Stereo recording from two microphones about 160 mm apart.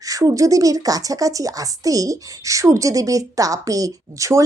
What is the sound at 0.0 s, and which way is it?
A woman's voice, 20° right (ahead or behind).